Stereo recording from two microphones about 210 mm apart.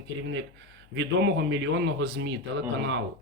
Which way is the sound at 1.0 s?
60° right (ahead or behind).